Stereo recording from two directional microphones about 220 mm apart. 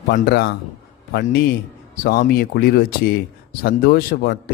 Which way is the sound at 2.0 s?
40° left (ahead or behind).